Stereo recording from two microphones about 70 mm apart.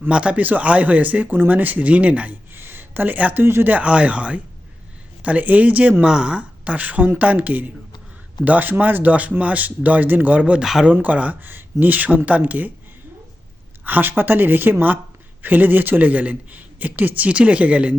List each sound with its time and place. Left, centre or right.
0.1 s speech: centre
2.5 s a sound: right
3.4 s speech: right
13.8 s speech: right